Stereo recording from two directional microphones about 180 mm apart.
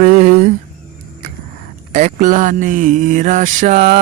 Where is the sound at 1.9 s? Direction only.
45° right (ahead or behind).